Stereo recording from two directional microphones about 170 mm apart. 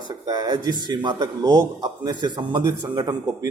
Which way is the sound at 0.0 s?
25° right (ahead or behind).